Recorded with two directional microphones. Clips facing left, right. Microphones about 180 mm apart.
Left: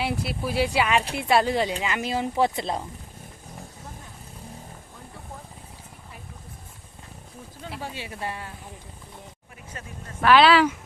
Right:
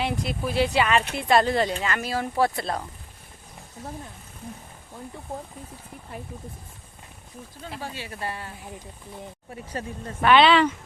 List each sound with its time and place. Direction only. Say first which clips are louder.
0.0 s speech: right 1 dB; 10° left (ahead or behind)
7.7 s speech: even; 5° left (ahead or behind)
7.9 s speech: even; 15° left (ahead or behind)
8.2 s speech: even; centre (ahead or behind)
9.7 s speech: right 9 dB; 35° right (ahead or behind)
10.2 s speech: even; centre (ahead or behind)